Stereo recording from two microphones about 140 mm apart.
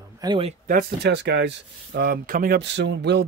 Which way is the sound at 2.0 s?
90° right.